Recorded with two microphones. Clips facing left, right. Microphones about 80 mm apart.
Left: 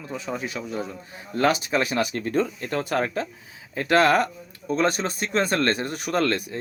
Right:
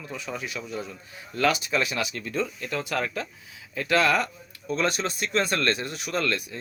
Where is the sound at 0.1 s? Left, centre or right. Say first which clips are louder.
Left 4 dB; left.